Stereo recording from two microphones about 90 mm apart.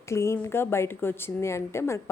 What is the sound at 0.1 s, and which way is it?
Speech, 30° left (ahead or behind).